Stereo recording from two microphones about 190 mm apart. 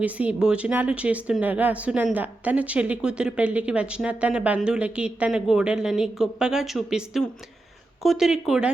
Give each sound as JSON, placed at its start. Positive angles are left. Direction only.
{"t": 0.0, "sound": "speech", "side_deg": -5}